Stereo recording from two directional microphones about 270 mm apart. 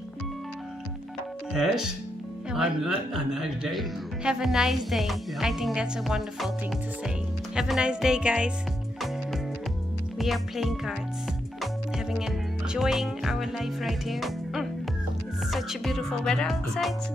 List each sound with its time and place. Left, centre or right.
1.5 s speech: centre
7.5 s speech: centre
10.1 s speech: centre
12.2 s speech: centre